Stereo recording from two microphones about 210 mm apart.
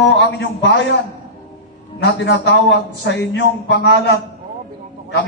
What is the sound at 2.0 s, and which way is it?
A man's voice, 55° left (ahead or behind).